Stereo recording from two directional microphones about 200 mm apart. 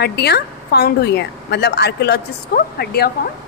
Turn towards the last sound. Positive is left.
turn(degrees=50)  # may be behind; listen again after turning